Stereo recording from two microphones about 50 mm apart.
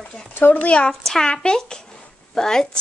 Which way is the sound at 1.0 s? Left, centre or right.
Centre.